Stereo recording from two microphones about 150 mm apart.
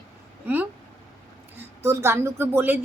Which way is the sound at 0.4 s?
10° right (ahead or behind).